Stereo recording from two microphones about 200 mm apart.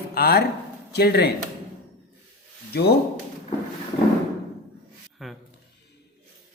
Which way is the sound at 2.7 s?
55° left (ahead or behind).